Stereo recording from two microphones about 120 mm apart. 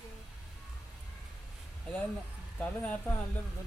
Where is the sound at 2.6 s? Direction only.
15° left (ahead or behind).